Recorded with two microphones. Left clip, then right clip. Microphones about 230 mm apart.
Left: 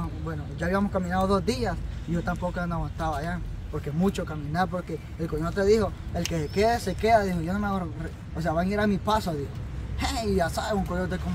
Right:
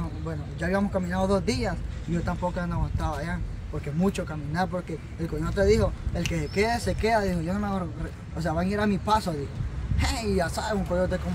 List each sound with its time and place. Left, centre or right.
0.6 s speech: centre